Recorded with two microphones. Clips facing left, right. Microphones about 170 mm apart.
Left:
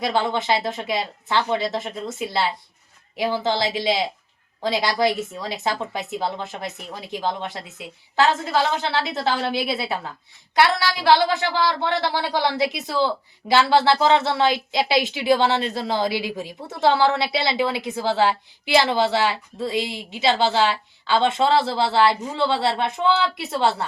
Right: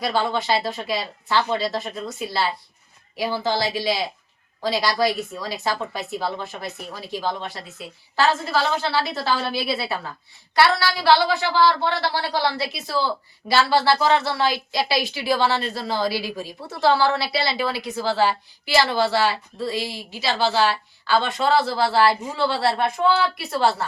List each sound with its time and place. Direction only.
0.0 s a woman's voice: 20° left (ahead or behind)